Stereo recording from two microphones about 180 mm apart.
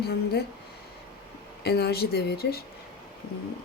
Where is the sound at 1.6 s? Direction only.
65° left (ahead or behind).